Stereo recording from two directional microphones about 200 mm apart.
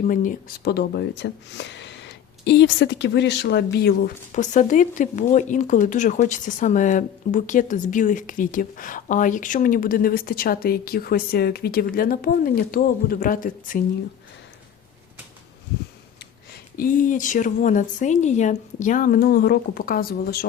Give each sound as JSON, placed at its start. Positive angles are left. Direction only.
{"t": 0.1, "sound": "speech", "side_deg": 40}
{"t": 16.7, "sound": "a woman's voice", "side_deg": 45}